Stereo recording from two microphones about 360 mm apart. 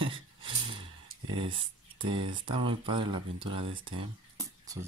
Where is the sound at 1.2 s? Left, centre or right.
Centre.